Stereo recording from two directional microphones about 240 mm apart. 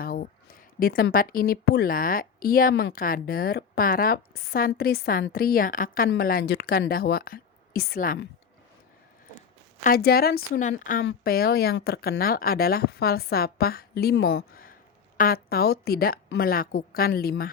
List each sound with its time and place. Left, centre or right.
0.0 s speech: left
9.8 s speech: left